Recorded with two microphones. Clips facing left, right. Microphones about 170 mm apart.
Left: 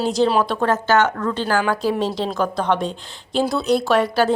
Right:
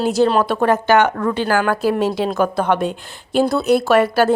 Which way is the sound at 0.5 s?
10° right (ahead or behind).